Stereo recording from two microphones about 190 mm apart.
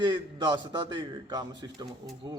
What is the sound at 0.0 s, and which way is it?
A man's voice, 25° right (ahead or behind).